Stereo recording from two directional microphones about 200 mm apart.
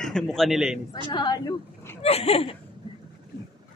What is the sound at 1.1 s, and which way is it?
Speech, 20° left (ahead or behind).